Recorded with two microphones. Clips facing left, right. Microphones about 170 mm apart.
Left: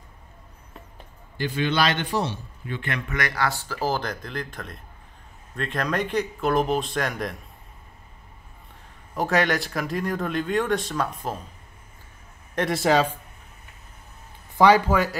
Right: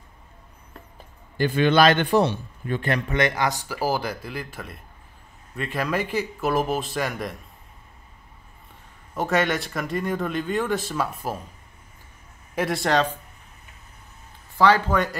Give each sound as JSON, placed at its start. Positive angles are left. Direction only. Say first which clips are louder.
{"t": 1.4, "sound": "a man's voice", "louder": "right 6 dB", "side_deg": -55}
{"t": 3.2, "sound": "speech", "louder": "right 2 dB", "side_deg": -20}
{"t": 9.1, "sound": "speech", "louder": "even", "side_deg": 0}
{"t": 12.5, "sound": "speech", "louder": "left 1 dB", "side_deg": 0}
{"t": 14.6, "sound": "speech", "louder": "left 2 dB", "side_deg": 10}